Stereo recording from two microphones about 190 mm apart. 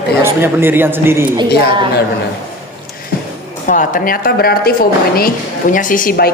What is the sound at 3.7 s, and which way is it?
A woman's voice, 45° left (ahead or behind).